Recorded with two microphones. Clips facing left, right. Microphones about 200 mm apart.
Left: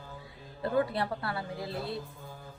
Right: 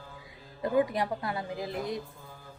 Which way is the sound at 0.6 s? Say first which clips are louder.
Right 2 dB; 15° right (ahead or behind).